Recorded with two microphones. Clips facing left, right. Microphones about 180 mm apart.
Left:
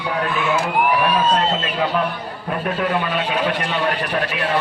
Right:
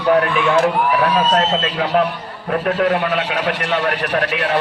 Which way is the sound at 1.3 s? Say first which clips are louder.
Right 2 dB; 80° right.